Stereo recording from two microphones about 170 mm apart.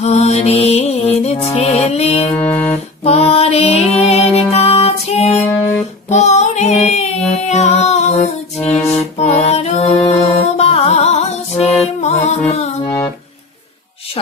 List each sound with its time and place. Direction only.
0.0 s music: 40° left (ahead or behind)
2.4 s music: 10° left (ahead or behind)
3.0 s music: 35° left (ahead or behind)
6.0 s female singing: 40° left (ahead or behind)
7.4 s music: 40° left (ahead or behind)